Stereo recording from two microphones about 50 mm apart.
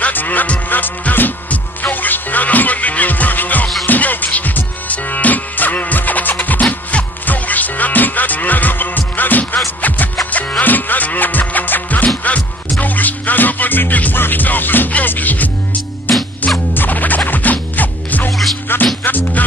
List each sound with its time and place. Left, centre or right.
0.0 s music: left
16.7 s music: left
18.7 s music: left